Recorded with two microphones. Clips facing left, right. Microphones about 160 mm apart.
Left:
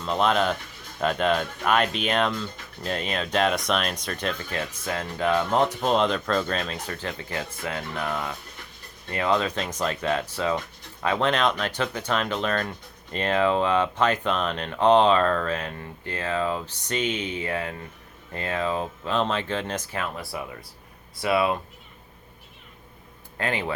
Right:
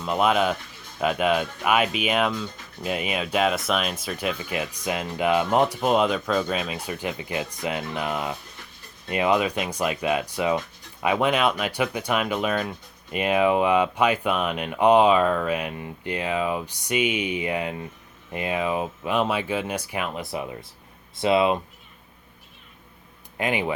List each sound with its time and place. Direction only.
0.0 s speech: 10° right (ahead or behind)
23.4 s speech: 15° right (ahead or behind)